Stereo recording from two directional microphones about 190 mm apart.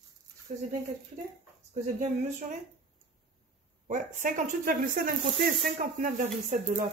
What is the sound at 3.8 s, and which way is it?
Speech, 40° right (ahead or behind).